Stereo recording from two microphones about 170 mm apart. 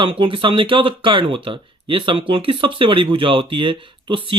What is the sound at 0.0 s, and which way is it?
Speech, 30° right (ahead or behind).